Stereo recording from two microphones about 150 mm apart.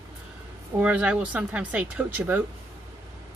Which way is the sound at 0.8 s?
10° right (ahead or behind).